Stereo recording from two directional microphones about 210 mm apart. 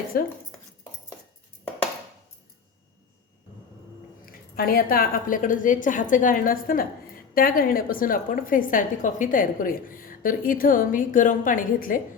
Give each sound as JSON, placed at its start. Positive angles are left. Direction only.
{"t": 0.1, "sound": "speech", "side_deg": 45}
{"t": 4.3, "sound": "a woman's voice", "side_deg": 45}